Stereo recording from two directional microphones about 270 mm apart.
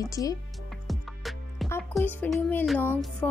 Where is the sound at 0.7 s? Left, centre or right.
Centre.